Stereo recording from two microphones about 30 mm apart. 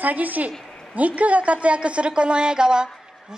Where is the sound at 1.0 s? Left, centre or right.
Right.